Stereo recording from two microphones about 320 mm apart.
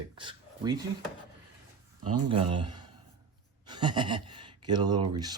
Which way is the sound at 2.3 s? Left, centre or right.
Centre.